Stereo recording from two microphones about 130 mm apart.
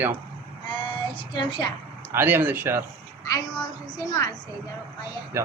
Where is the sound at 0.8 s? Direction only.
40° left (ahead or behind).